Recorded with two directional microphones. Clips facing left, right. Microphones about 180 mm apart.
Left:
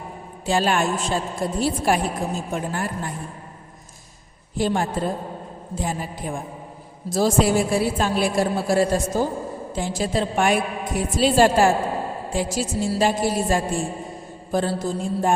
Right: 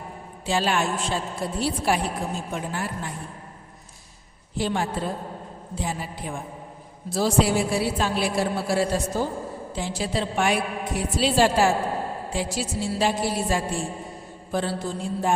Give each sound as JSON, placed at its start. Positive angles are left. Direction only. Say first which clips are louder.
{"t": 0.4, "sound": "a woman's voice", "louder": "left 3 dB", "side_deg": 50}
{"t": 4.5, "sound": "a woman's voice", "louder": "left 3 dB", "side_deg": 45}